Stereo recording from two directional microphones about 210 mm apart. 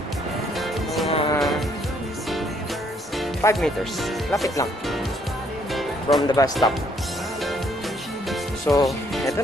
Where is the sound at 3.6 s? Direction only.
Centre (ahead or behind).